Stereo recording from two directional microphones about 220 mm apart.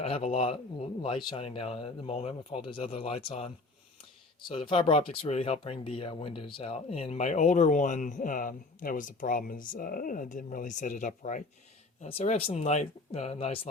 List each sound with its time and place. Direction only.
0.0 s speech: 25° left (ahead or behind)